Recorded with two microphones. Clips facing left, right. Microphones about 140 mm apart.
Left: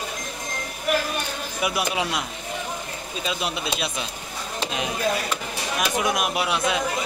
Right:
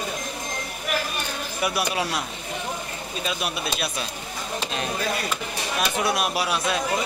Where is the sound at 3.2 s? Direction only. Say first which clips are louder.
Left 1 dB; 20° left (ahead or behind).